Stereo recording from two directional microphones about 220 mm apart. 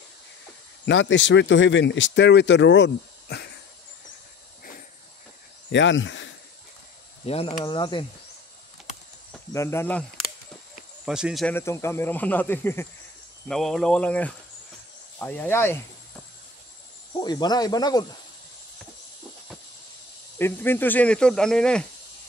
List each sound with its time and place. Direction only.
0.8 s speech: 55° left (ahead or behind)
5.7 s speech: 55° left (ahead or behind)
7.2 s speech: 25° left (ahead or behind)
9.5 s speech: 10° left (ahead or behind)
11.1 s speech: centre (ahead or behind)
11.5 s speech: 10° left (ahead or behind)
17.2 s speech: 20° left (ahead or behind)
20.3 s speech: 10° left (ahead or behind)